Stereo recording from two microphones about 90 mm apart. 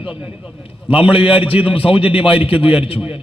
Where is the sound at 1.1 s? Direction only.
85° left.